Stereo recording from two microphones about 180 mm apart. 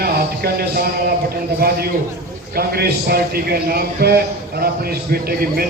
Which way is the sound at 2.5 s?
60° right (ahead or behind).